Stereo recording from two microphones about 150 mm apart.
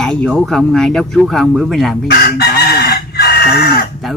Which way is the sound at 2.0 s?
90° left.